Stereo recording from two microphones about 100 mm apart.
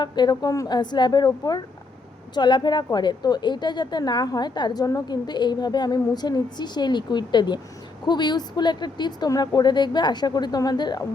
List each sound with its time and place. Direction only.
0.0 s a woman's voice: 45° left (ahead or behind)